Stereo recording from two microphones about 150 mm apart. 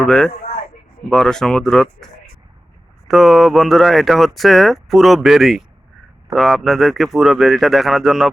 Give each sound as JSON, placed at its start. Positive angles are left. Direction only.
{"t": 0.0, "sound": "speech", "side_deg": 5}
{"t": 3.1, "sound": "speech", "side_deg": 0}